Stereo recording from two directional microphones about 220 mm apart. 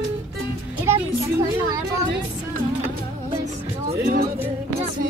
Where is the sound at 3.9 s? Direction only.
45° right (ahead or behind).